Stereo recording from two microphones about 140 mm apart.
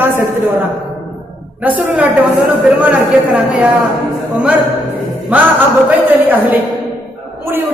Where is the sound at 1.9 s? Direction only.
10° right (ahead or behind).